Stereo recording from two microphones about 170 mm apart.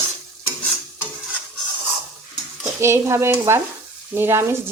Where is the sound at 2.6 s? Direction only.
15° right (ahead or behind).